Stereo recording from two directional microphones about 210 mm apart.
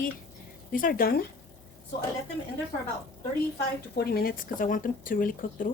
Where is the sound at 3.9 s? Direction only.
50° left (ahead or behind).